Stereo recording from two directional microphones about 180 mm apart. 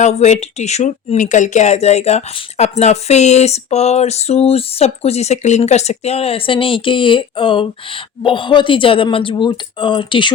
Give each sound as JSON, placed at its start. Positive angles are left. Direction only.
{"t": 0.0, "sound": "a woman's voice", "side_deg": 40}